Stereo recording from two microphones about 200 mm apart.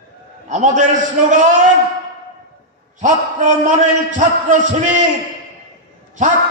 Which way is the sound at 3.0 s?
40° right (ahead or behind).